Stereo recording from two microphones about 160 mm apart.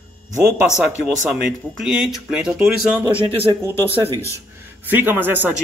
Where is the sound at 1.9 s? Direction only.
5° right (ahead or behind).